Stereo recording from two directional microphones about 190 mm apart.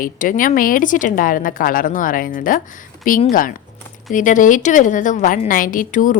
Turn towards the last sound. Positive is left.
turn(degrees=45)  # may be behind; listen again after turning